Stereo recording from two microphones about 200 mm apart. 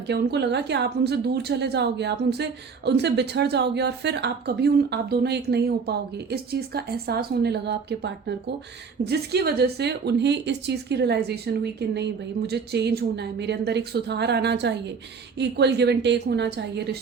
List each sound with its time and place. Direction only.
0.1 s a woman's voice: 55° right (ahead or behind)